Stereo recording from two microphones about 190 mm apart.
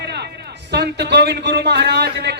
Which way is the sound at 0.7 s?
65° right (ahead or behind).